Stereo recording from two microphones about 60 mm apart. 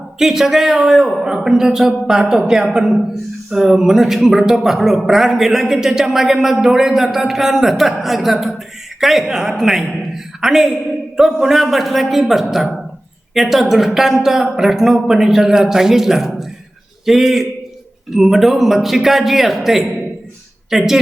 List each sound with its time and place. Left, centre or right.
0.2 s speech: centre